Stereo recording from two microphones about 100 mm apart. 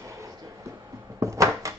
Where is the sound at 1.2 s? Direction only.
30° right (ahead or behind).